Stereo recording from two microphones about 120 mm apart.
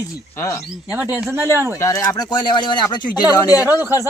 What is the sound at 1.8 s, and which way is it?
Speech, 30° left (ahead or behind).